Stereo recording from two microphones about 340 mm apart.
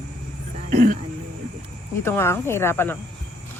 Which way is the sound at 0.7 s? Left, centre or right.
Right.